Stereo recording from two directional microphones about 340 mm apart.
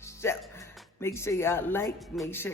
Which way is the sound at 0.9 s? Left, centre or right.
Centre.